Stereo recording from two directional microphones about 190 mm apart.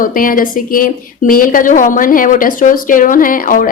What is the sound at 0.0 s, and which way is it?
A woman's voice, 45° left (ahead or behind).